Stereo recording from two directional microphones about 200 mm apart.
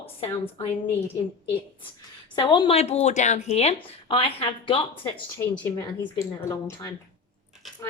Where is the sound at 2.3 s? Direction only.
20° left (ahead or behind).